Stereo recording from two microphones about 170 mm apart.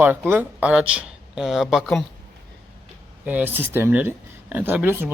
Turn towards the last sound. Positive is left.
turn(degrees=-15)  # may be behind; listen again after turning